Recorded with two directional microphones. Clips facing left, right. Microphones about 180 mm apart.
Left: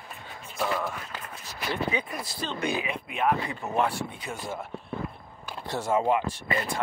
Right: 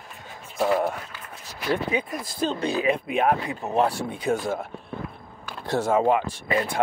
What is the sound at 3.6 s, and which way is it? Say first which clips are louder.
Speech: right 5 dB; 35° right (ahead or behind).